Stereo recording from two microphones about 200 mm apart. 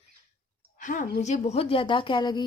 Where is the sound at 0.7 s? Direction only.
40° left (ahead or behind); by 2.4 s 20° left (ahead or behind).